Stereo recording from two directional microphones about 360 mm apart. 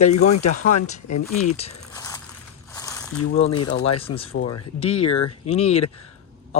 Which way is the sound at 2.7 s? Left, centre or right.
Centre.